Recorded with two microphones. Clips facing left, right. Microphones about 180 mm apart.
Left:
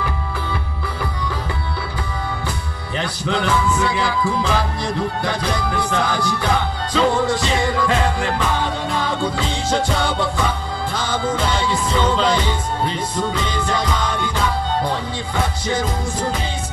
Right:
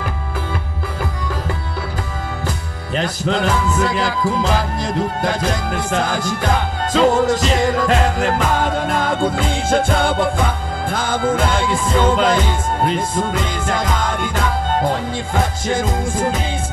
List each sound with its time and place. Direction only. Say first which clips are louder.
3.3 s music: even; 40° right (ahead or behind)
15.6 s music: right 2 dB; 50° right (ahead or behind)